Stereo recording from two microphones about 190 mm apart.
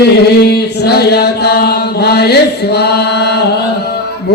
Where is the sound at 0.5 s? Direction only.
60° left (ahead or behind).